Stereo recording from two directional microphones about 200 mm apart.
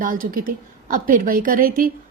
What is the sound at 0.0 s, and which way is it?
Speech, 45° right (ahead or behind).